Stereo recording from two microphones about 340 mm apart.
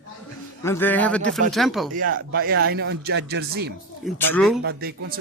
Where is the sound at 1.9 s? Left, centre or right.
Right.